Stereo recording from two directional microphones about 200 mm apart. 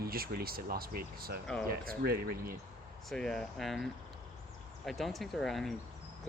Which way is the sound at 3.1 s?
5° left (ahead or behind).